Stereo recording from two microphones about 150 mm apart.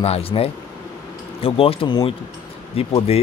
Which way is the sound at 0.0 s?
40° left (ahead or behind).